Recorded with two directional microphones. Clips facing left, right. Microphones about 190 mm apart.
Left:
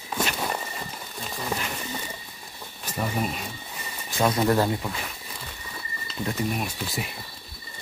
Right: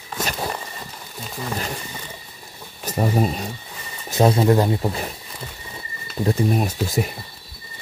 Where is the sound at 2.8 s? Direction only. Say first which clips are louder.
Right 7 dB; 40° right (ahead or behind).